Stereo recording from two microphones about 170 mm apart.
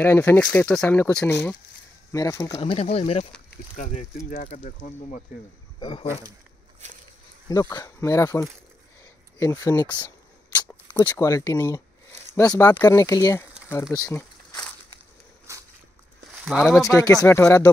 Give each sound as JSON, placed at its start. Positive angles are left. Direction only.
{"t": 0.0, "sound": "speech", "side_deg": 10}
{"t": 2.6, "sound": "speech", "side_deg": 35}
{"t": 5.8, "sound": "speech", "side_deg": 25}
{"t": 6.8, "sound": "speech", "side_deg": -45}
{"t": 7.4, "sound": "speech", "side_deg": 20}
{"t": 13.9, "sound": "a sound", "side_deg": 20}
{"t": 16.4, "sound": "speech", "side_deg": 0}
{"t": 16.8, "sound": "speech", "side_deg": 20}